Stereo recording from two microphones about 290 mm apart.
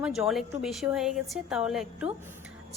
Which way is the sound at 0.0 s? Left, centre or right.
Centre.